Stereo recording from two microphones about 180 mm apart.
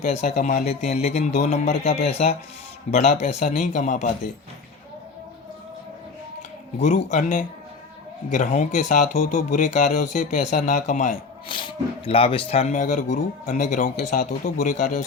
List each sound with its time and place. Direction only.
0.0 s speech: 40° left (ahead or behind)
3.2 s speech: 45° left (ahead or behind)
6.7 s speech: 40° left (ahead or behind)
11.4 s speech: 30° left (ahead or behind); by 15.0 s 45° left (ahead or behind)